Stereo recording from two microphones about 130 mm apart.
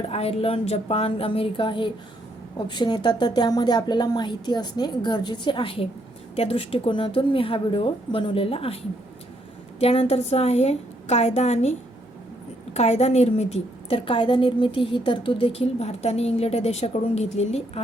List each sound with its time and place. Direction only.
0.1 s a woman's voice: 50° left (ahead or behind)
9.8 s a woman's voice: 50° left (ahead or behind)
12.7 s a woman's voice: 55° left (ahead or behind)